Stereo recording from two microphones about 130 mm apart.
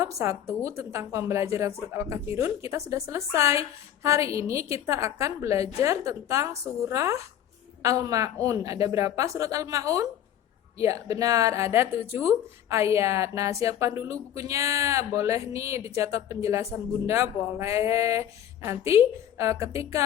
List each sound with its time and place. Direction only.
0.0 s a woman's voice: 20° right (ahead or behind)